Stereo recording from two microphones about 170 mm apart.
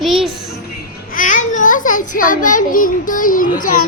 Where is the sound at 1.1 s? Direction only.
50° left (ahead or behind).